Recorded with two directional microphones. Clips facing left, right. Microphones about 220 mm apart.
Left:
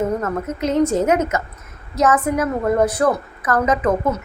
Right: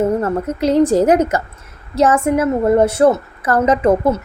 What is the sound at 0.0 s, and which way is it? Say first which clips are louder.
A woman's voice: right 5 dB; 30° right (ahead or behind).